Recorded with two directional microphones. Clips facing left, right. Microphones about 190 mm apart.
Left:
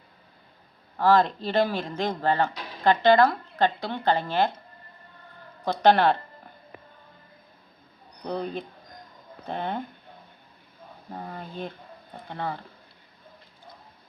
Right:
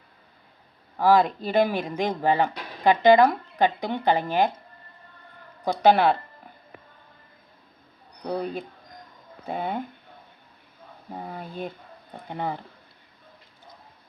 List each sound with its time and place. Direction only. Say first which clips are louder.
0.9 s speech: right 1 dB; 10° right (ahead or behind)
5.6 s speech: right 1 dB; 10° right (ahead or behind)
8.3 s speech: right 2 dB; 5° right (ahead or behind)
11.1 s speech: right 1 dB; 10° right (ahead or behind)